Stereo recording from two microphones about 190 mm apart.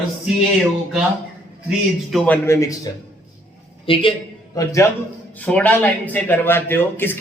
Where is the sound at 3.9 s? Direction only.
30° left (ahead or behind).